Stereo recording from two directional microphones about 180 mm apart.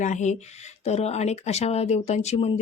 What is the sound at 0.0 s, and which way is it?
Speech, 40° left (ahead or behind).